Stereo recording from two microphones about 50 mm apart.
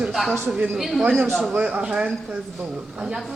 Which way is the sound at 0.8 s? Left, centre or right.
Centre.